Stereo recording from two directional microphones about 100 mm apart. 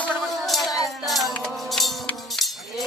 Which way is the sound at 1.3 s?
5° left (ahead or behind).